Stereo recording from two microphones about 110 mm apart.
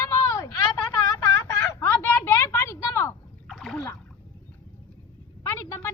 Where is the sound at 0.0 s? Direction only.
25° left (ahead or behind).